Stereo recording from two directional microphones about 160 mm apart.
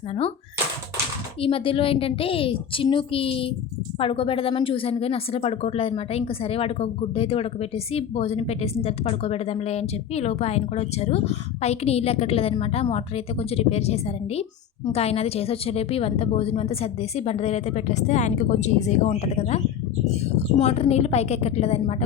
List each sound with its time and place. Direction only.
0.1 s speech: 35° left (ahead or behind)
1.4 s speech: 35° left (ahead or behind)